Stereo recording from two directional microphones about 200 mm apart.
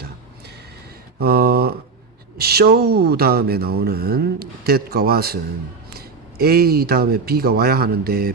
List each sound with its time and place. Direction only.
1.2 s speech: 50° right (ahead or behind)